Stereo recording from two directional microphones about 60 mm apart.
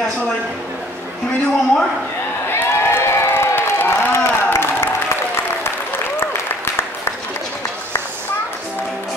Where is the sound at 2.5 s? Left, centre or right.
Left.